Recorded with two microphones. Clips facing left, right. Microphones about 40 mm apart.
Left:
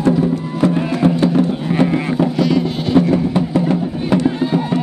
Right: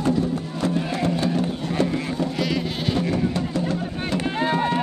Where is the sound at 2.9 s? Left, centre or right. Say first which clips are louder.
Left 11 dB; left.